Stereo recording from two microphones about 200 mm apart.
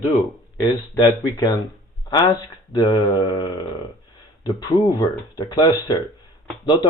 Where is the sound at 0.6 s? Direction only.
20° left (ahead or behind).